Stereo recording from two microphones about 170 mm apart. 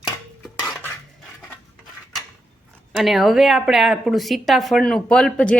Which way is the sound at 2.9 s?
Centre (ahead or behind).